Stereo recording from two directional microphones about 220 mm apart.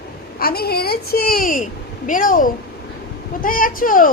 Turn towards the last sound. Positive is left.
turn(degrees=40)  # may be behind; listen again after turning